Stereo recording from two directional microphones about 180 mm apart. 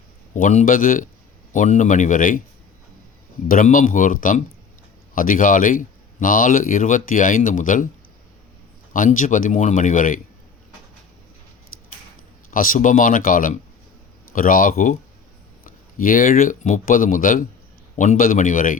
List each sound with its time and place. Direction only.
0.3 s speech: 45° left (ahead or behind)
3.5 s speech: 45° left (ahead or behind)
8.9 s speech: 45° left (ahead or behind)
12.5 s speech: 50° left (ahead or behind)